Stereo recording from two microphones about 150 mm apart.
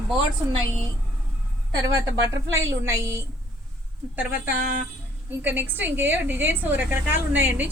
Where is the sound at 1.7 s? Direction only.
25° right (ahead or behind).